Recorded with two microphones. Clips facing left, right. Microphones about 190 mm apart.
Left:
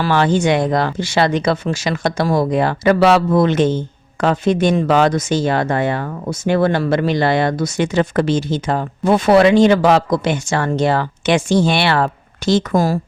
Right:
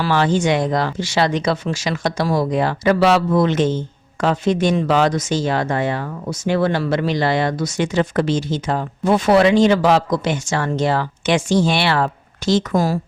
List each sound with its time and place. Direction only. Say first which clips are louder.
0.0 s speech: left 2 dB; 55° left (ahead or behind)